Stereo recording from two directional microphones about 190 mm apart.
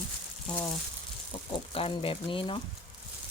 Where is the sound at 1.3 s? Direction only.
30° left (ahead or behind).